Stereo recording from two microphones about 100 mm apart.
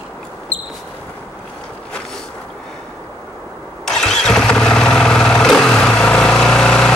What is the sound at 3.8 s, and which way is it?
Engine starting, 5° left (ahead or behind).